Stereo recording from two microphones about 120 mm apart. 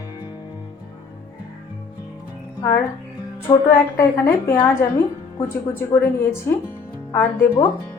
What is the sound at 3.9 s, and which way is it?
Speech, 20° left (ahead or behind).